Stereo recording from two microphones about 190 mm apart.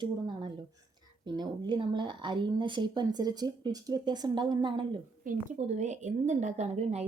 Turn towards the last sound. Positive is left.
turn(degrees=-35)  # may be behind; listen again after turning